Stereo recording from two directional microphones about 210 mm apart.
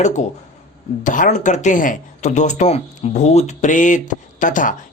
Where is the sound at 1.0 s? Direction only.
40° left (ahead or behind).